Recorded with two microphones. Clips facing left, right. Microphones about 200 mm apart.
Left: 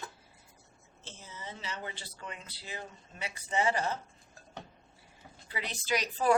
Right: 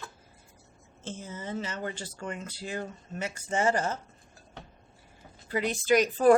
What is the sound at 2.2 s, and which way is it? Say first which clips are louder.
Speech: right 8 dB; 45° right (ahead or behind).